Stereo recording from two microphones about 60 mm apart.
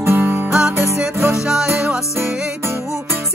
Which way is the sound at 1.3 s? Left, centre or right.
Centre.